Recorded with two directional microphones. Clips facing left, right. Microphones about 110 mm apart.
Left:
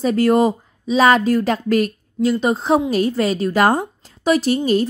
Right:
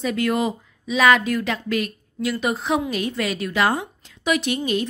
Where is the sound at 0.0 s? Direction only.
35° left (ahead or behind).